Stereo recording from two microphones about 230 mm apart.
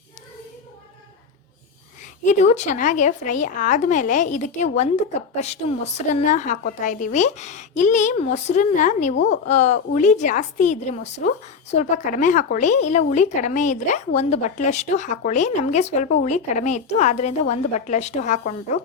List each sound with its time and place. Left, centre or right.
2.2 s a woman's voice: left
9.1 s a woman's voice: left
9.5 s a woman's voice: left